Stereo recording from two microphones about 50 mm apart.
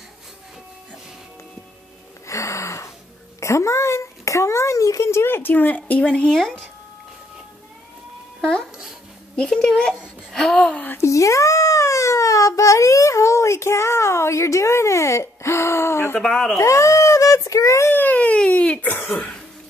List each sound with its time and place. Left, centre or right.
2.2 s gasp: left
3.3 s a sound: left
5.5 s speech: left
6.3 s speech: centre
8.4 s music: centre
9.4 s speech: centre
10.3 s a sound: centre
10.6 s speech: left
11.0 s a sound: left
16.2 s speech: centre
16.5 s a sound: left
17.8 s baby cry: left
18.1 s baby cry: left
18.9 s throat clearing: left